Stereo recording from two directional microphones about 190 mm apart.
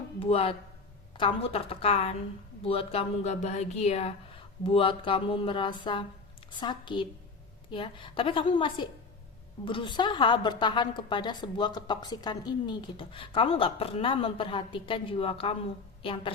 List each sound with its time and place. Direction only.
0.2 s a woman's voice: 30° left (ahead or behind)